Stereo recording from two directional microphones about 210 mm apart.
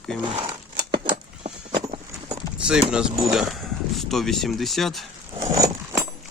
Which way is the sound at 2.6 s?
5° right (ahead or behind).